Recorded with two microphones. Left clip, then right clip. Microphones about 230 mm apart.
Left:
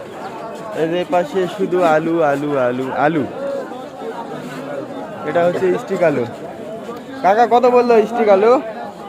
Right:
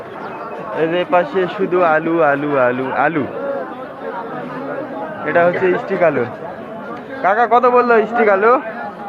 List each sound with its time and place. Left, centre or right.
0.8 s a man's voice: left
5.2 s a man's voice: centre